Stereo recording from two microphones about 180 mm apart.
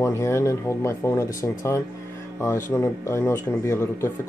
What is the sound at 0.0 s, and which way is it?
Speech, 15° left (ahead or behind).